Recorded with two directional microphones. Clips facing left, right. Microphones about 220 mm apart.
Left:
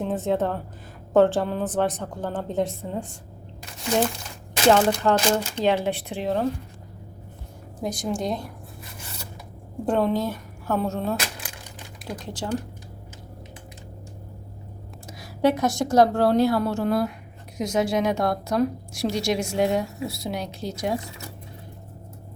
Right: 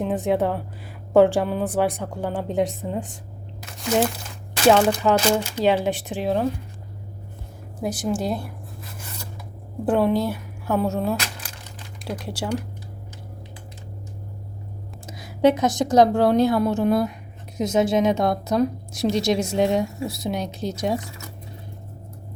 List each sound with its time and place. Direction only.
0.0 s a woman's voice: 15° right (ahead or behind)
4.7 s a woman's voice: 5° right (ahead or behind)
7.8 s a woman's voice: 5° right (ahead or behind)
9.8 s a woman's voice: 5° right (ahead or behind)
12.2 s a woman's voice: 10° right (ahead or behind)
15.0 s a woman's voice: 20° right (ahead or behind)